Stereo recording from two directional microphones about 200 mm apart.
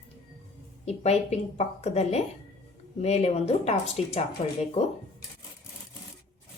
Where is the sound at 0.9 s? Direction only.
30° left (ahead or behind).